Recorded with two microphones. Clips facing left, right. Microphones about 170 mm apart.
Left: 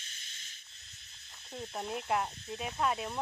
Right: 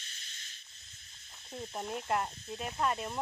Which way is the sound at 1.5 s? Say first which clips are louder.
Even; centre (ahead or behind).